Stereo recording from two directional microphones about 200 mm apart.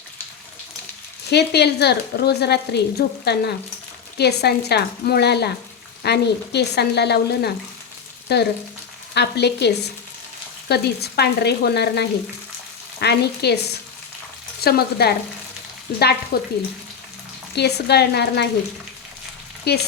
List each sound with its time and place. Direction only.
1.3 s speech: 55° left (ahead or behind)
17.5 s speech: 55° left (ahead or behind)
19.7 s speech: 55° left (ahead or behind)